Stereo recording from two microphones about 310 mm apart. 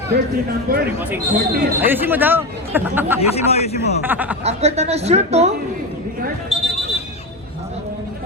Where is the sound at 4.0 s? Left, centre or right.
Centre.